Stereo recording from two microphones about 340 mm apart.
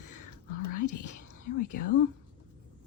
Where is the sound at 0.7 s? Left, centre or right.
Left.